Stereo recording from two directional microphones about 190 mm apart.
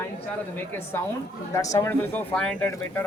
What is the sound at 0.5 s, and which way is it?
A man's voice, 10° left (ahead or behind).